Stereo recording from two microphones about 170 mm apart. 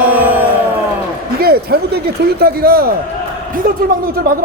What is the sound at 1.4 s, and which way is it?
Speech, 65° right (ahead or behind).